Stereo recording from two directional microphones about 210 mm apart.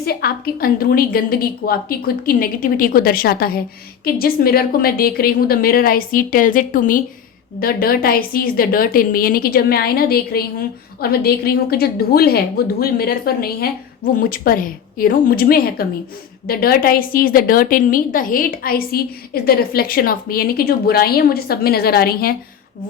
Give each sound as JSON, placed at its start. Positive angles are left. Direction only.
{"t": 0.0, "sound": "a woman's voice", "side_deg": 50}